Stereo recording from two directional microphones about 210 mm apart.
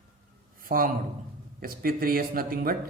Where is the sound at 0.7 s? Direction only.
45° right (ahead or behind).